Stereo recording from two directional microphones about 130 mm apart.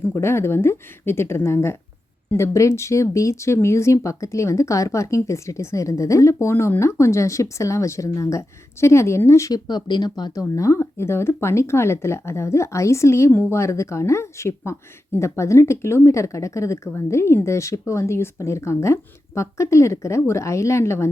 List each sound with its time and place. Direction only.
0.1 s speech: 20° left (ahead or behind)